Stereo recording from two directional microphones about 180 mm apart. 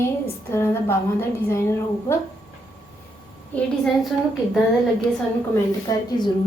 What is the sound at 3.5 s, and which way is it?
Speech, 5° left (ahead or behind).